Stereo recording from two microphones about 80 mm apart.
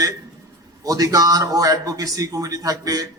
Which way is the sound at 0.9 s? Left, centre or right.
Right.